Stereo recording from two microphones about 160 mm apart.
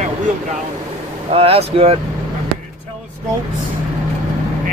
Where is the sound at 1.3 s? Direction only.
35° right (ahead or behind).